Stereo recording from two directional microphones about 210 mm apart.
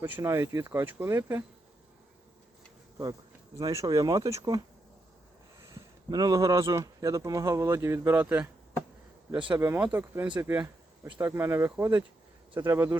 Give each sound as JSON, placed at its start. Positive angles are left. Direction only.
{"t": 0.0, "sound": "speech", "side_deg": -10}
{"t": 3.6, "sound": "speech", "side_deg": -15}
{"t": 5.6, "sound": "speech", "side_deg": -15}
{"t": 9.6, "sound": "speech", "side_deg": -10}